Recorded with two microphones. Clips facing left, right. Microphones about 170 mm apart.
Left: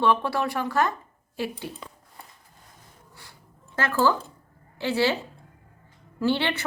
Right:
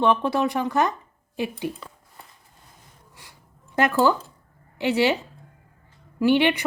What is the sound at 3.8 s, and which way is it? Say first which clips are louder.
A woman's voice: right 3 dB; 15° right (ahead or behind).